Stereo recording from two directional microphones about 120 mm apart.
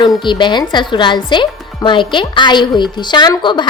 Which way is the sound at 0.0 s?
40° left (ahead or behind).